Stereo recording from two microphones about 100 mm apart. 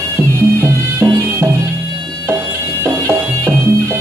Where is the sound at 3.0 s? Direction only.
30° right (ahead or behind).